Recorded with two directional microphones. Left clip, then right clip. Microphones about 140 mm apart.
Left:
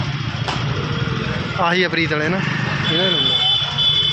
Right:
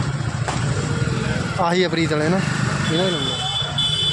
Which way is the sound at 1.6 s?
25° right (ahead or behind).